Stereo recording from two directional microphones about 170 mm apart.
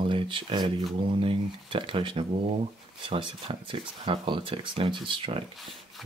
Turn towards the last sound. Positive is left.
turn(degrees=0)  # may be behind; listen again after turning